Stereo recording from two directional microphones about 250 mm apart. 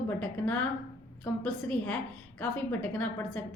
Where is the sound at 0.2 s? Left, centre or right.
Centre.